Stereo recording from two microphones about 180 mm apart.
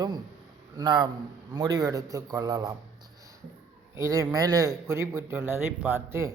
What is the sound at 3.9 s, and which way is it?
Speech, 15° right (ahead or behind).